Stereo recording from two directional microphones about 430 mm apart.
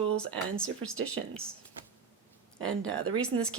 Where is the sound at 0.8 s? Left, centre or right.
Right.